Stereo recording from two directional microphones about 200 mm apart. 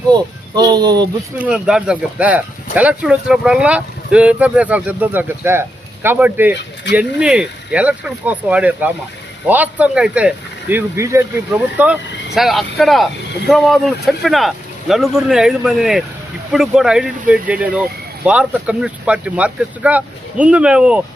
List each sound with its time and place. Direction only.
0.1 s speech: 20° right (ahead or behind)
1.4 s speech: 5° right (ahead or behind)